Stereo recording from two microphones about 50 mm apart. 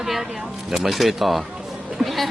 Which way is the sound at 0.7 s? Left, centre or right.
Centre.